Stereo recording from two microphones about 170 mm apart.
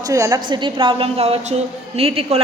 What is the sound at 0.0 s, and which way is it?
A woman's voice, 20° right (ahead or behind).